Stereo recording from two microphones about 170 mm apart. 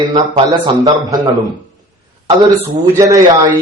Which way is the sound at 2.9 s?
20° right (ahead or behind).